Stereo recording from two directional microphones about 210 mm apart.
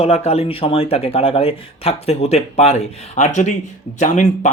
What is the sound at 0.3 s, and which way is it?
Speech, 30° left (ahead or behind).